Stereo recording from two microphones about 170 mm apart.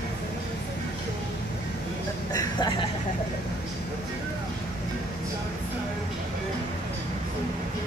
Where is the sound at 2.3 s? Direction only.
25° left (ahead or behind).